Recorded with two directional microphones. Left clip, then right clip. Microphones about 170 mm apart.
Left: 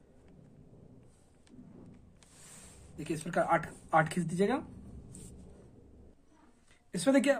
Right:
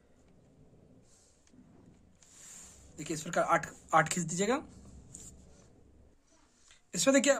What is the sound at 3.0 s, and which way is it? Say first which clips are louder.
Speech: even; 35° right (ahead or behind).